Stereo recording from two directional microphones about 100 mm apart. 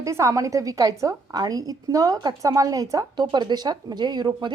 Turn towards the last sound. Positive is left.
turn(degrees=-50)  # may be behind; listen again after turning